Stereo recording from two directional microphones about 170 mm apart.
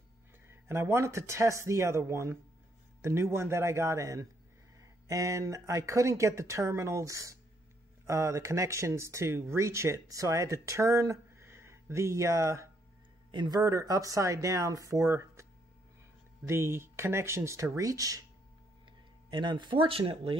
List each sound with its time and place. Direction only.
0.5 s speech: 15° right (ahead or behind)
16.4 s speech: 15° right (ahead or behind)
19.3 s speech: 25° right (ahead or behind)